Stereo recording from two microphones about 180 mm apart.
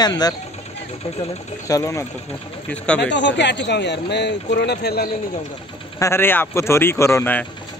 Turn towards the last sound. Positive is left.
turn(degrees=10)  # may be behind; listen again after turning